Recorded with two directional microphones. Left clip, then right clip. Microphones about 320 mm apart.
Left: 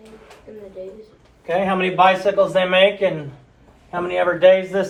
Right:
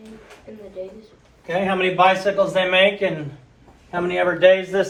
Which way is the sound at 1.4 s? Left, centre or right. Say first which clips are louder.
Left 1 dB; centre.